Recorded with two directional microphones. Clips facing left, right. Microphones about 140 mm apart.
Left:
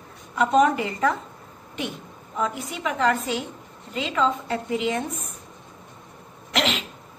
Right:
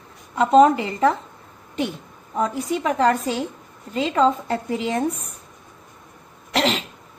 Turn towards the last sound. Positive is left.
turn(degrees=-35)  # may be behind; listen again after turning